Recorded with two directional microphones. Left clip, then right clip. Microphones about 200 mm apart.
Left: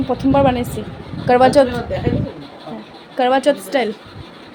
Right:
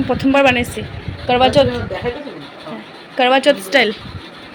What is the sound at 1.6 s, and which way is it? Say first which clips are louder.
Speech: even; 30° left (ahead or behind).